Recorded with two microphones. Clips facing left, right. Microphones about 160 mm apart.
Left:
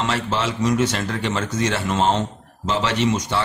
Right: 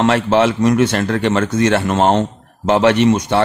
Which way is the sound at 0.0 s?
60° right (ahead or behind).